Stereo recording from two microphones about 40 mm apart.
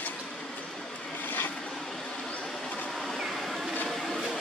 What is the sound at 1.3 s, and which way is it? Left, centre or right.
Vehicle, left.